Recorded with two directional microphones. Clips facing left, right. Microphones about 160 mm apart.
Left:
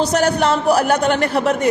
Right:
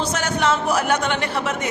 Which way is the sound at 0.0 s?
35° left (ahead or behind).